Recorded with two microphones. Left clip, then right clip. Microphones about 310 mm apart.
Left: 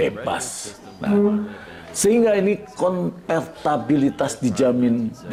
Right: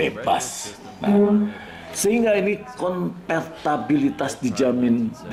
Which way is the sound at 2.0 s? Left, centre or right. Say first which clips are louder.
Left 2 dB; left.